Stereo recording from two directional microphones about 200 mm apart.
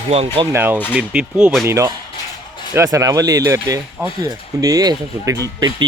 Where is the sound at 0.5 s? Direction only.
10° right (ahead or behind).